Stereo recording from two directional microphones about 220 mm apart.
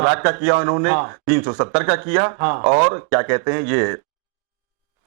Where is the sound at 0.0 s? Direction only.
20° right (ahead or behind).